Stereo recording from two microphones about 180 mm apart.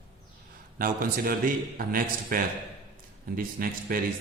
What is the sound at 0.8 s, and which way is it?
A man's voice, 50° right (ahead or behind).